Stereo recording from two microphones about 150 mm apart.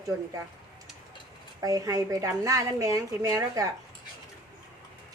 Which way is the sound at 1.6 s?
20° right (ahead or behind).